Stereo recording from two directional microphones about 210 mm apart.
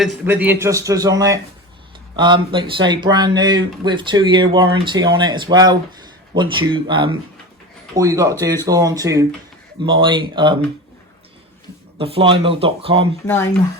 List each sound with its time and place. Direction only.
0.0 s a man's voice: 5° right (ahead or behind); by 10.6 s 20° right (ahead or behind)
11.9 s speech: 25° right (ahead or behind)